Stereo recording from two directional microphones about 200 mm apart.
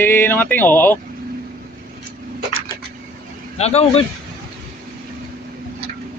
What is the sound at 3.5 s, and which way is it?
Speech, 30° left (ahead or behind).